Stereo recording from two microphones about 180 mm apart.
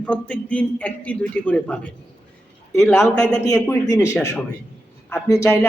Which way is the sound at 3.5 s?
15° left (ahead or behind).